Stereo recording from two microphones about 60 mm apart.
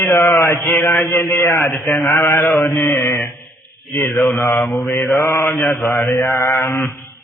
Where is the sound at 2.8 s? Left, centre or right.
Left.